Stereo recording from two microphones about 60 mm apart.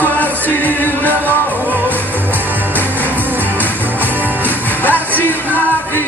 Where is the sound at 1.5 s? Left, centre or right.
Right.